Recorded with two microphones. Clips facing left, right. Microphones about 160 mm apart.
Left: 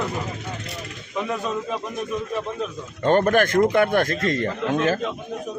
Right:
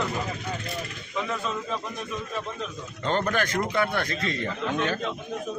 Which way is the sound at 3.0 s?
50° left (ahead or behind).